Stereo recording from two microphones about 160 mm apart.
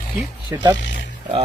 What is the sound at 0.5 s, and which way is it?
Speech, 15° right (ahead or behind).